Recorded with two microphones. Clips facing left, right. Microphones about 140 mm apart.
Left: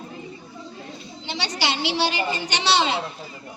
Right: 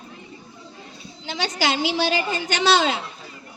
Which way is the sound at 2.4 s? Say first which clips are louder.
Right 3 dB; 50° right (ahead or behind).